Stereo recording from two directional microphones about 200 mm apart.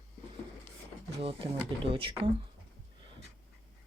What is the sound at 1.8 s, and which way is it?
Speech, 25° right (ahead or behind).